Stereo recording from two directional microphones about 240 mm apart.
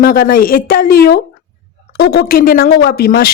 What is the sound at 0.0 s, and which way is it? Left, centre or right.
Speech, left.